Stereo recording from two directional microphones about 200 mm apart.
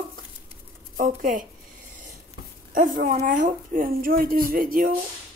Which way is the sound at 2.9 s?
40° right (ahead or behind).